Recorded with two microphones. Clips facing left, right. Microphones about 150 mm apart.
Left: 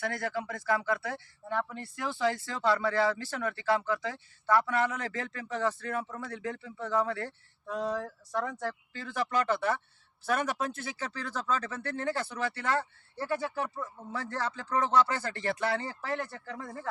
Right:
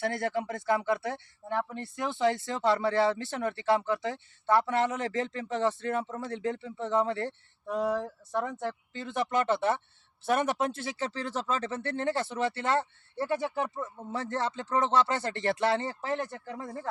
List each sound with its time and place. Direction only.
0.0 s speech: 25° right (ahead or behind)